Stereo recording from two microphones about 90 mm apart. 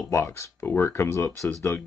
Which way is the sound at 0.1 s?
30° left (ahead or behind).